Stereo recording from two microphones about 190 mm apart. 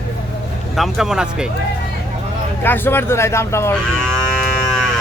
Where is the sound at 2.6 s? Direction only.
10° left (ahead or behind).